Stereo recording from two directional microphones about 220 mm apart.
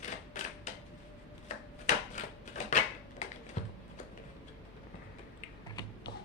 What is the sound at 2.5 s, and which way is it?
Typewriter, 30° left (ahead or behind).